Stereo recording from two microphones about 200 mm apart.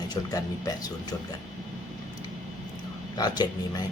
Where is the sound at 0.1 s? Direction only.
20° left (ahead or behind).